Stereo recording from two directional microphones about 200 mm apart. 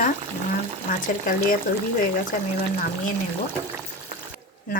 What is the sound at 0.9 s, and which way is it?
Speech, 45° left (ahead or behind).